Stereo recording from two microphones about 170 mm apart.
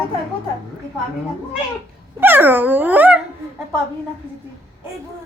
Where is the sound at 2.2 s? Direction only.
10° right (ahead or behind).